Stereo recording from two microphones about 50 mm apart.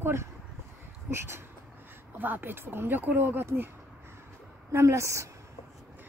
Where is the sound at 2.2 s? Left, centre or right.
Right.